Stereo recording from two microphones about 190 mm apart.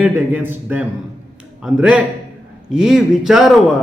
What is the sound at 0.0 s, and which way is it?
A man's voice, 10° right (ahead or behind).